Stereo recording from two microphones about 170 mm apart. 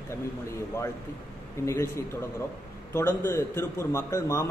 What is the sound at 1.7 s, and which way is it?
A man's voice, 15° left (ahead or behind).